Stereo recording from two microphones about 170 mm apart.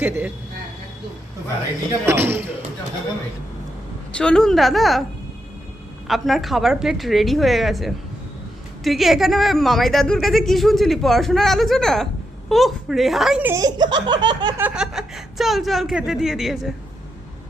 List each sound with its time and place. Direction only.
0.0 s a woman's voice: 10° right (ahead or behind)
2.0 s a woman's voice: 15° right (ahead or behind)
4.1 s speech: 5° left (ahead or behind)
6.1 s speech: centre (ahead or behind)
13.5 s speech: 20° right (ahead or behind)
14.6 s speech: 5° right (ahead or behind)